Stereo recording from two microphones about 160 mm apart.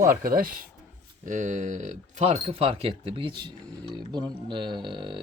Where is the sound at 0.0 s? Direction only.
65° right (ahead or behind).